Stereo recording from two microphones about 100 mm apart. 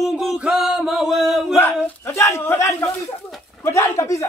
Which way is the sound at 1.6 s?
25° left (ahead or behind).